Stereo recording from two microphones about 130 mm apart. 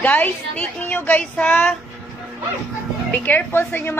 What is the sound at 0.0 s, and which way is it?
A woman's voice, 10° left (ahead or behind).